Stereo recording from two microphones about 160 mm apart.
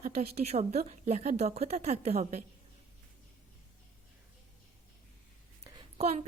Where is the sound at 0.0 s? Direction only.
40° right (ahead or behind).